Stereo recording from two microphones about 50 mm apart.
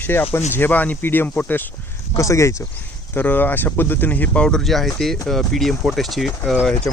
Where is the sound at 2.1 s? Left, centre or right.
Left.